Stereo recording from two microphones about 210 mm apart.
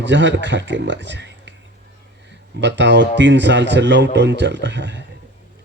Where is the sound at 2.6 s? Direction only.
60° right (ahead or behind).